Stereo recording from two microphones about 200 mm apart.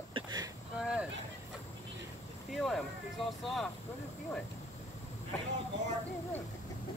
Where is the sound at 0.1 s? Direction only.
20° right (ahead or behind).